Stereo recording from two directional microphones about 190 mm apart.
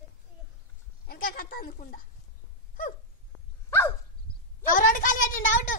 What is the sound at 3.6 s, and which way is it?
Dog, 15° left (ahead or behind).